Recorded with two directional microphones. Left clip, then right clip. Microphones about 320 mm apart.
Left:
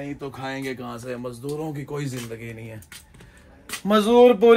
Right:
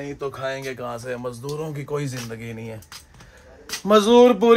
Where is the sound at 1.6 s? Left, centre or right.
Centre.